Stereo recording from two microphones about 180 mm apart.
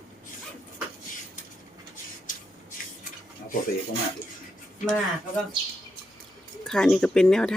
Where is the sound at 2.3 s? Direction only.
45° left (ahead or behind).